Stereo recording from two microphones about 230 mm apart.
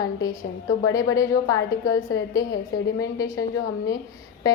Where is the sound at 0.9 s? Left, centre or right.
Centre.